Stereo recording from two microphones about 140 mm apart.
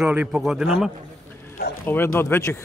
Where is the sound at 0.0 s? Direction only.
10° right (ahead or behind).